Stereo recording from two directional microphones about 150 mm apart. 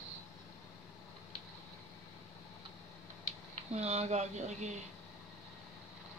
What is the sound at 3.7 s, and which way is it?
Speech, 45° right (ahead or behind).